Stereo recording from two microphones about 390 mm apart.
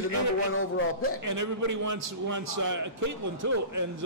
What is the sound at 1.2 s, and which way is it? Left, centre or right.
A man's voice, right.